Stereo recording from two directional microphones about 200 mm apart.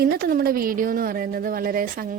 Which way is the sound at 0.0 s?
50° right (ahead or behind).